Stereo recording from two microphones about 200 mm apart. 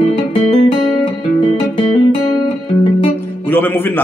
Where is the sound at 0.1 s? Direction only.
30° left (ahead or behind).